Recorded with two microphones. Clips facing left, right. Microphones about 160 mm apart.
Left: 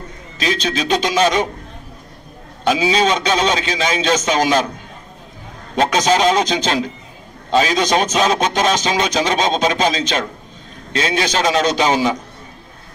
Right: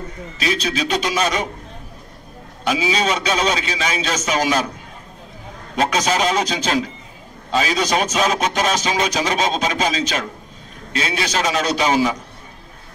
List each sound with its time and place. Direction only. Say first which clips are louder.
0.7 s a man's voice: left 4 dB; 30° left (ahead or behind)
2.6 s a man's voice: left 4 dB; 30° left (ahead or behind)
5.8 s a man's voice: left 4 dB; 30° left (ahead or behind)